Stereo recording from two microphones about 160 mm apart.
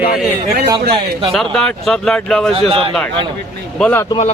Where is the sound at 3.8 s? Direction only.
10° left (ahead or behind).